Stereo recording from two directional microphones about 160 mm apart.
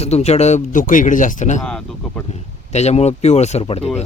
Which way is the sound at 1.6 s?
5° left (ahead or behind).